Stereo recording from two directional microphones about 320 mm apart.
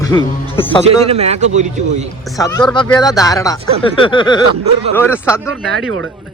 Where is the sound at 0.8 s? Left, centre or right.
Centre.